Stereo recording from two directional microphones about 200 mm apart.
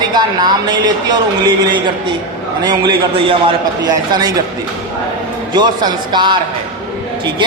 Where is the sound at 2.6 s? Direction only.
25° right (ahead or behind).